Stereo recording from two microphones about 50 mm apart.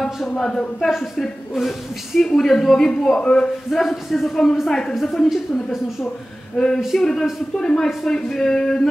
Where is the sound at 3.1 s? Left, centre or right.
Left.